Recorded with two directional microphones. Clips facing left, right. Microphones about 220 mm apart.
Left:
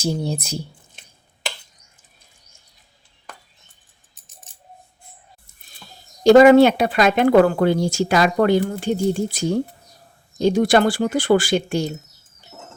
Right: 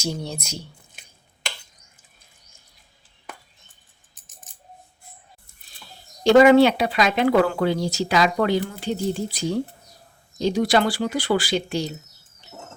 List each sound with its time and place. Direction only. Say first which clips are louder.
0.3 s speech: left 7 dB; 35° left (ahead or behind)
6.2 s speech: left 3 dB; 45° left (ahead or behind)